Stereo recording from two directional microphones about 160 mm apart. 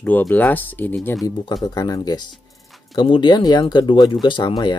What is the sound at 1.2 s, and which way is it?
Speech, 25° left (ahead or behind).